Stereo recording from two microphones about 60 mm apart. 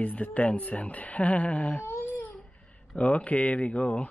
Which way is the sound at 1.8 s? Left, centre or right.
Left.